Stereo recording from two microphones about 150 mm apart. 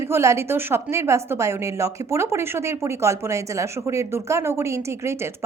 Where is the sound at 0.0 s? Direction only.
20° right (ahead or behind).